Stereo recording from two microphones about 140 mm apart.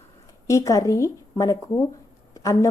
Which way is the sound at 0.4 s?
25° left (ahead or behind).